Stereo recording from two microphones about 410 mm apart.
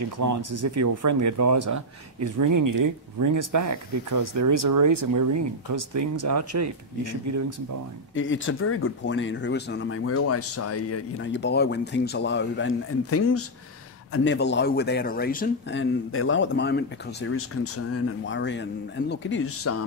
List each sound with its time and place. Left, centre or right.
0.2 s speech: right
8.1 s speech: left